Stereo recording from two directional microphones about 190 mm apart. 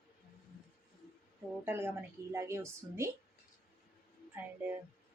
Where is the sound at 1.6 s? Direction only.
10° right (ahead or behind).